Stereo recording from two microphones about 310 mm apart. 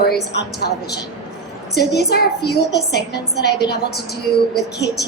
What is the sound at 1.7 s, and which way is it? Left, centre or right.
A woman's voice, left.